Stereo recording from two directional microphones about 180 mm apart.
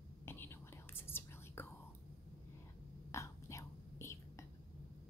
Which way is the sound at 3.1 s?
15° left (ahead or behind).